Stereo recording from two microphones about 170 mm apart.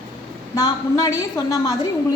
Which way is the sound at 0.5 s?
20° left (ahead or behind).